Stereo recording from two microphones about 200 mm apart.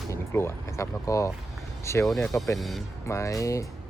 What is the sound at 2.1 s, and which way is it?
Speech, centre (ahead or behind).